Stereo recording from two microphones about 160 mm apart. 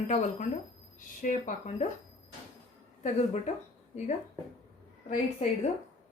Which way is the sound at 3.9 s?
45° left (ahead or behind).